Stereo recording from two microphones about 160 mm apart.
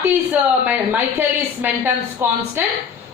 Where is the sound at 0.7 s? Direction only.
10° right (ahead or behind).